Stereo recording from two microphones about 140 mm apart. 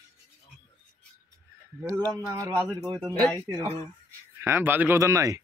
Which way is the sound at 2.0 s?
20° right (ahead or behind).